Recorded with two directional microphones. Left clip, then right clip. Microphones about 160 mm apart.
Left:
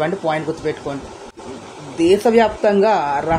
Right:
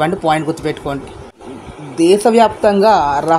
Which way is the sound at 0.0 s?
55° right (ahead or behind).